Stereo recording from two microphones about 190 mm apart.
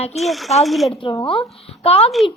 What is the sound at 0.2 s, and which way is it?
Speech, centre (ahead or behind).